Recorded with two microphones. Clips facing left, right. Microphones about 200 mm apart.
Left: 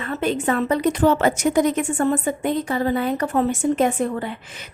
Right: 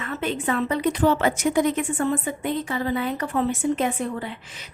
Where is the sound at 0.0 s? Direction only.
40° left (ahead or behind).